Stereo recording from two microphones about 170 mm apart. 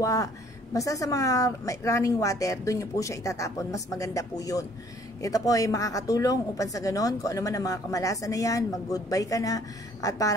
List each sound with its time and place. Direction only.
0.0 s a woman's voice: 20° left (ahead or behind)